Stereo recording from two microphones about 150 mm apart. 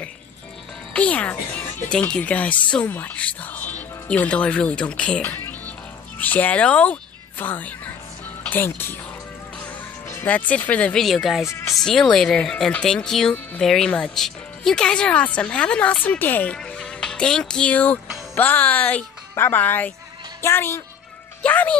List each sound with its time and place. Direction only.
0.9 s speech: 10° left (ahead or behind)
9.6 s music: 10° left (ahead or behind)
10.5 s speech: 10° left (ahead or behind)